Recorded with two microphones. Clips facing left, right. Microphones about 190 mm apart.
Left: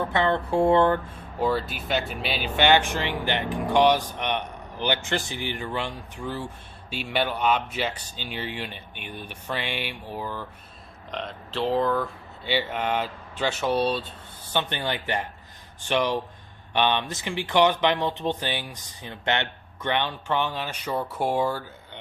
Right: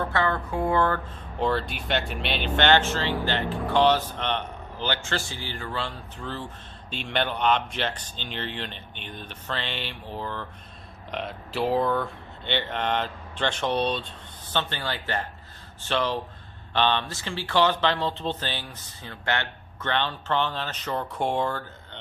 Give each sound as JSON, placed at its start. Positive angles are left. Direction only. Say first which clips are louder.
{"t": 0.0, "sound": "speech", "louder": "left 2 dB", "side_deg": 20}
{"t": 1.4, "sound": "speech", "louder": "left 1 dB", "side_deg": 5}
{"t": 11.1, "sound": "speech", "louder": "right 1 dB", "side_deg": -5}
{"t": 14.5, "sound": "speech", "louder": "left 2 dB", "side_deg": 15}